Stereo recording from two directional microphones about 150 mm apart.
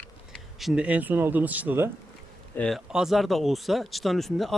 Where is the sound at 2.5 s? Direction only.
10° left (ahead or behind).